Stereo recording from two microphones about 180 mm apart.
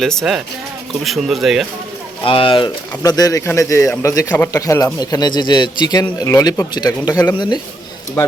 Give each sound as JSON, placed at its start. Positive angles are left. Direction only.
{"t": 0.0, "sound": "speech", "side_deg": 0}
{"t": 2.2, "sound": "speech", "side_deg": 30}